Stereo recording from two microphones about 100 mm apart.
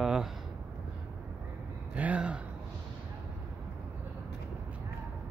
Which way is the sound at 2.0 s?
15° right (ahead or behind).